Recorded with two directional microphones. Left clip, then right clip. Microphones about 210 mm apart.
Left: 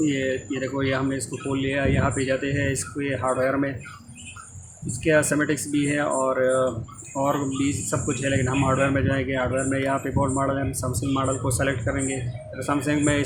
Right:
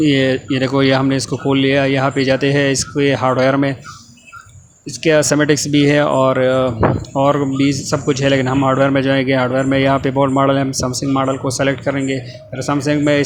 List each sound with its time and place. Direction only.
0.0 s speech: 35° right (ahead or behind)
5.0 s speech: 35° right (ahead or behind)